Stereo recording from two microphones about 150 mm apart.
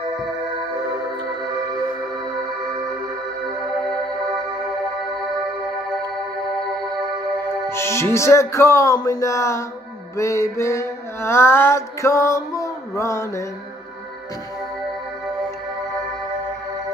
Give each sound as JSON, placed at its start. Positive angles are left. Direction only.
{"t": 7.7, "sound": "speech", "side_deg": 20}
{"t": 10.1, "sound": "mantra", "side_deg": 20}